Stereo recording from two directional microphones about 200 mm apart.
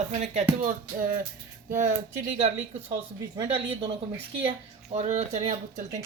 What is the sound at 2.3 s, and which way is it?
Speech, 30° right (ahead or behind).